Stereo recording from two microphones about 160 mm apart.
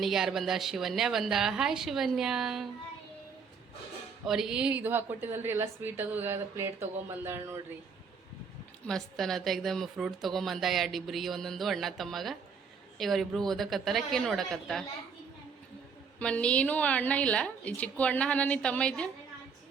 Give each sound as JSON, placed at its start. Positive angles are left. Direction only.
{"t": 0.0, "sound": "a woman's voice", "side_deg": 0}
{"t": 4.3, "sound": "a woman's voice", "side_deg": -5}
{"t": 8.9, "sound": "a woman's voice", "side_deg": 0}
{"t": 16.1, "sound": "a woman's voice", "side_deg": 10}